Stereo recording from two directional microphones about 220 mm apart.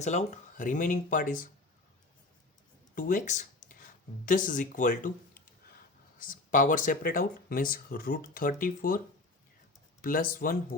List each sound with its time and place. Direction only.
0.0 s speech: 30° left (ahead or behind)
2.9 s speech: 35° left (ahead or behind)
10.0 s speech: 40° left (ahead or behind)